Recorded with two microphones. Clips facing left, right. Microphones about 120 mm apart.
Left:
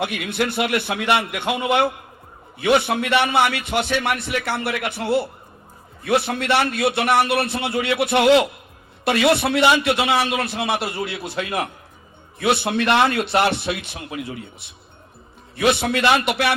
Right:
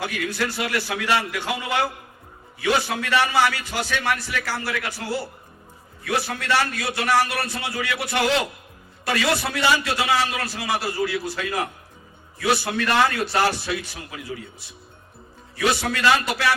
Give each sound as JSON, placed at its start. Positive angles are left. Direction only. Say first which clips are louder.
{"t": 0.0, "sound": "a man's voice", "louder": "left 3 dB", "side_deg": 25}
{"t": 6.7, "sound": "a man's voice", "louder": "left 8 dB", "side_deg": 60}
{"t": 7.0, "sound": "a man's voice", "louder": "left 1 dB", "side_deg": 25}